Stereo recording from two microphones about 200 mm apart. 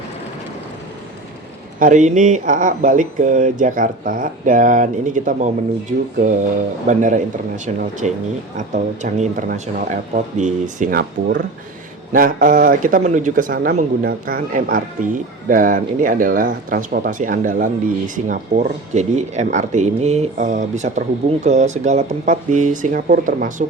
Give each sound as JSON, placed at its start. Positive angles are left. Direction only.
{"t": 1.8, "sound": "a man's voice", "side_deg": -40}